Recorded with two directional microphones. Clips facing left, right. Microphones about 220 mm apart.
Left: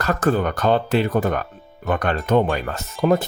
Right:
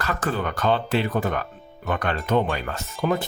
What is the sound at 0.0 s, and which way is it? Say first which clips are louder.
Speech: left 6 dB; 45° left (ahead or behind).